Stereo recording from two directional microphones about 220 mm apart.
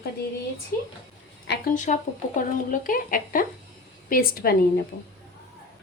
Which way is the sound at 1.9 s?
35° left (ahead or behind).